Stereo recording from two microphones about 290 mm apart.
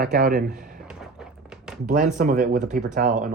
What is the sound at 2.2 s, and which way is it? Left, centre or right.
Speech, right.